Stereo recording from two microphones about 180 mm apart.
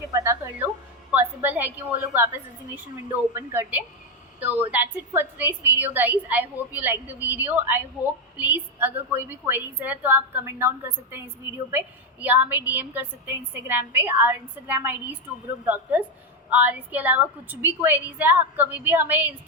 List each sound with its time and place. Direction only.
0.1 s a woman's voice: 15° right (ahead or behind)
11.7 s a woman's voice: 10° right (ahead or behind)